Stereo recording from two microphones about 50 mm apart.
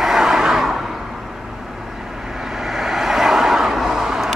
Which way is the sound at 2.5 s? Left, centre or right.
Centre.